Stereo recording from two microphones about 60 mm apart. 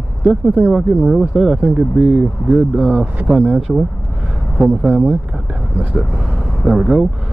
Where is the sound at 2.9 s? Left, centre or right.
Right.